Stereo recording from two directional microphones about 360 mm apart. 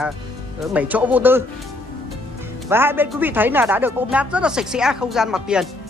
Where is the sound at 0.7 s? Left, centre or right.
Centre.